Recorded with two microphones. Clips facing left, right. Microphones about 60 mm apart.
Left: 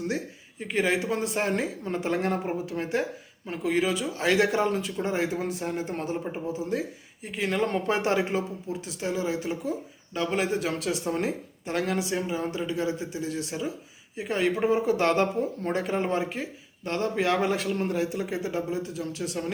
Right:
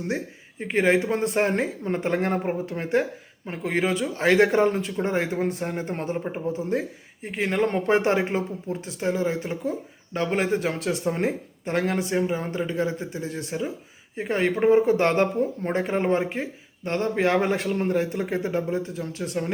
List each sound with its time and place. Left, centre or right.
0.6 s speech: right